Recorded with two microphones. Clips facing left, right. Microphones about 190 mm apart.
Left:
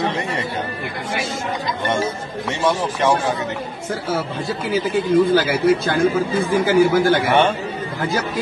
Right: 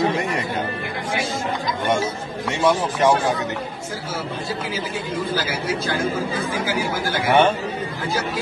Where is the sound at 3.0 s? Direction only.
10° right (ahead or behind).